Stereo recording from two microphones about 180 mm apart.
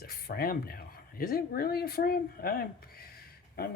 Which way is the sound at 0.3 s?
55° left (ahead or behind).